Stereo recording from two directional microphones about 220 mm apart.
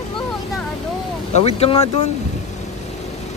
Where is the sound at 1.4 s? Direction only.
25° left (ahead or behind).